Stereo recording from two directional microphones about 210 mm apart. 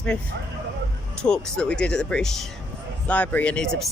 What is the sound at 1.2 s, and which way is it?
Speech, 5° left (ahead or behind).